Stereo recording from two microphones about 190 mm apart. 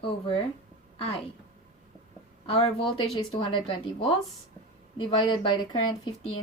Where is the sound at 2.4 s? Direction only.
30° left (ahead or behind).